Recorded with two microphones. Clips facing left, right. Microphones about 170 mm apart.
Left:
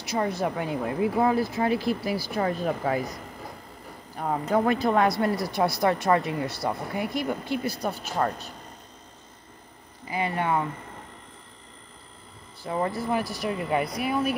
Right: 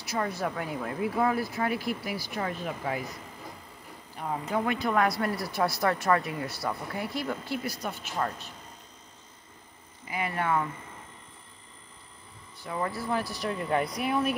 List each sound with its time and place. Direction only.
0.0 s speech: 20° left (ahead or behind); by 3.2 s 40° left (ahead or behind)
4.2 s speech: 55° left (ahead or behind)
4.6 s speech: 35° left (ahead or behind)
10.0 s speech: 30° left (ahead or behind)
12.6 s speech: 25° left (ahead or behind)
13.9 s speech: centre (ahead or behind)